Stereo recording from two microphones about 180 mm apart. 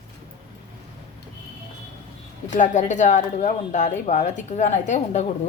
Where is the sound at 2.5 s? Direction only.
45° left (ahead or behind).